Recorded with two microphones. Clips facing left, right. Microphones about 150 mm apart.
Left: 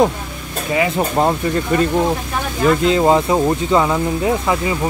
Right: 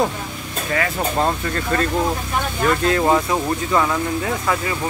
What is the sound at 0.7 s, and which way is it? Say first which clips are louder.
Speech: left 4 dB; 20° left (ahead or behind).